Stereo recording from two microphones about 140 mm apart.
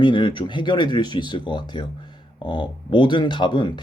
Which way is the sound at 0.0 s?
35° left (ahead or behind).